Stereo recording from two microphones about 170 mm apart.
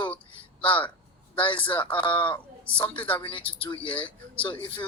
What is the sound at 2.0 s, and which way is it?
Speech, 30° left (ahead or behind).